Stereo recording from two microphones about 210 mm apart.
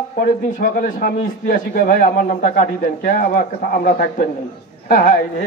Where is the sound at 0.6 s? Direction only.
40° left (ahead or behind).